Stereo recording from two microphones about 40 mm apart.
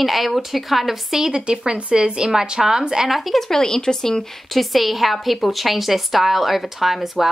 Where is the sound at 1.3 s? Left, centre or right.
Right.